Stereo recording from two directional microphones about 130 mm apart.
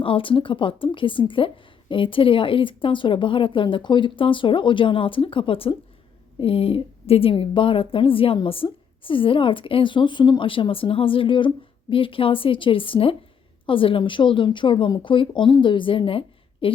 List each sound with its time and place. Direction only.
0.0 s a woman's voice: 40° left (ahead or behind)